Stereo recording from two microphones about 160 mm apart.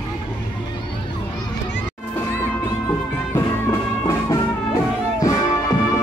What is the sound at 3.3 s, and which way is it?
Music, 15° left (ahead or behind).